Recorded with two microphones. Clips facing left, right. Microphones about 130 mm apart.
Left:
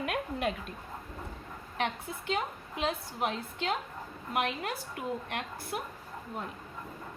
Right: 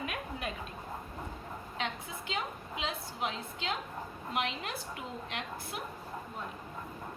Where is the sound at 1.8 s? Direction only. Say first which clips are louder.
Left 5 dB; 50° left (ahead or behind).